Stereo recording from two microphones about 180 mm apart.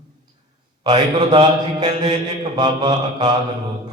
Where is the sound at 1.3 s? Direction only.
25° right (ahead or behind).